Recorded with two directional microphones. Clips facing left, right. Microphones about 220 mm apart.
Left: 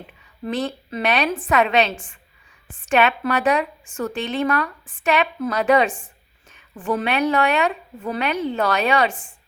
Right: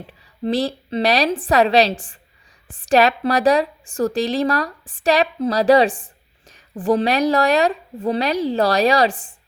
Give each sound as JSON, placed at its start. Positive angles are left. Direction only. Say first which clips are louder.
{"t": 0.1, "sound": "a woman's voice", "louder": "right 5 dB", "side_deg": -35}